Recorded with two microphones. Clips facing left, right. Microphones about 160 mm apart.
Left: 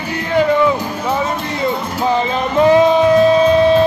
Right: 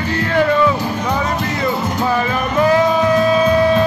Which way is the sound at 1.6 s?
20° left (ahead or behind).